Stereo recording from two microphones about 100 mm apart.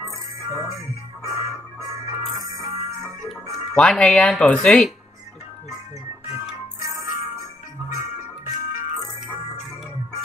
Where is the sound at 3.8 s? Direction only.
10° left (ahead or behind).